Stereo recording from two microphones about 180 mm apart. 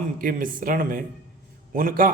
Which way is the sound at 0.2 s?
50° right (ahead or behind).